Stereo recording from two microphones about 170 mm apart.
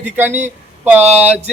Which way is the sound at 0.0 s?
10° right (ahead or behind).